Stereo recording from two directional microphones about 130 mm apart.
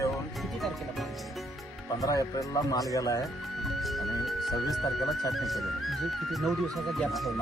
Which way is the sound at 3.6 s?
Centre (ahead or behind).